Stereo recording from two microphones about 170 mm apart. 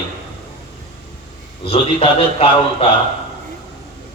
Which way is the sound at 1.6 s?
35° left (ahead or behind).